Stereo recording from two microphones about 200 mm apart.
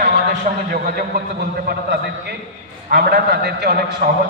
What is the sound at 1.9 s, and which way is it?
A man's voice, 55° right (ahead or behind).